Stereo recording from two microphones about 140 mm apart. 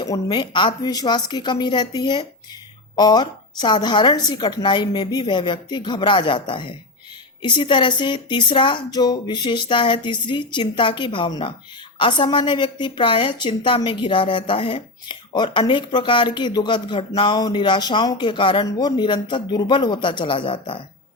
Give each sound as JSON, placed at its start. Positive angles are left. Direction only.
{"t": 0.0, "sound": "a woman's voice", "side_deg": 30}